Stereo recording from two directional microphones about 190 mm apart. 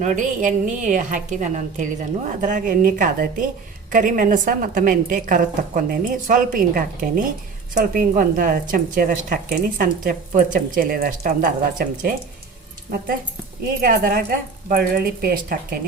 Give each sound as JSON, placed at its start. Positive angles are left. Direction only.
{"t": 0.0, "sound": "a woman's voice", "side_deg": -40}
{"t": 13.8, "sound": "a woman's voice", "side_deg": -50}